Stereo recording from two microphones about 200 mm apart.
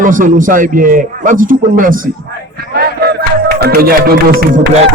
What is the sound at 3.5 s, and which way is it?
Speech, 50° right (ahead or behind).